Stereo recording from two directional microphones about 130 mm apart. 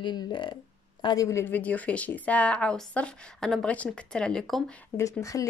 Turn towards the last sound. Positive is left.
turn(degrees=25)  # may be behind; listen again after turning